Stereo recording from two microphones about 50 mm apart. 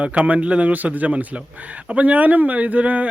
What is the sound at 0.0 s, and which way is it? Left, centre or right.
A man's voice, right.